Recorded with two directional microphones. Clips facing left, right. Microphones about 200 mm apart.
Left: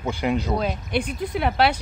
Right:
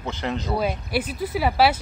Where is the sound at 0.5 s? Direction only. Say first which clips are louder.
Even; 5° right (ahead or behind).